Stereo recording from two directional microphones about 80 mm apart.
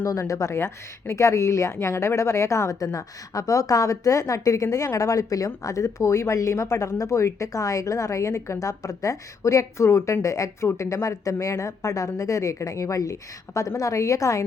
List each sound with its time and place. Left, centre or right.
0.0 s speech: left